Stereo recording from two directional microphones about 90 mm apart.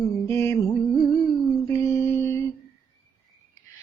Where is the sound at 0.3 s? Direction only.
30° left (ahead or behind).